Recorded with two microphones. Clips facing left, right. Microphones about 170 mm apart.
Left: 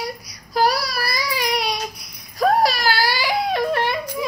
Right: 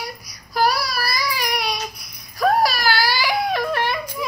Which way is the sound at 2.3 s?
30° left (ahead or behind).